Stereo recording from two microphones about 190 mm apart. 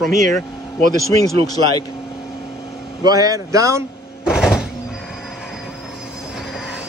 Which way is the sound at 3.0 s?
20° right (ahead or behind).